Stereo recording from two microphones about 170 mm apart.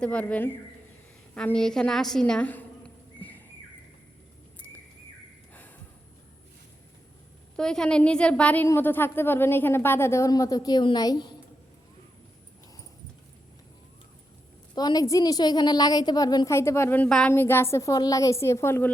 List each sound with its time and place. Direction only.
0.0 s a woman's voice: 10° left (ahead or behind)
7.5 s a woman's voice: 5° left (ahead or behind); by 11.3 s 25° left (ahead or behind)
14.8 s a woman's voice: 20° left (ahead or behind)